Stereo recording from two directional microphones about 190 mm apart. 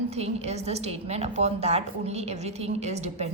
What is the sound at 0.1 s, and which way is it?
A woman's voice, 35° right (ahead or behind).